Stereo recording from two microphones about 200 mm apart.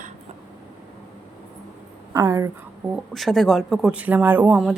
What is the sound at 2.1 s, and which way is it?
Speech, 15° right (ahead or behind).